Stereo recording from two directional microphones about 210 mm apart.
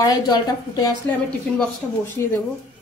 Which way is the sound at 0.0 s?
20° left (ahead or behind).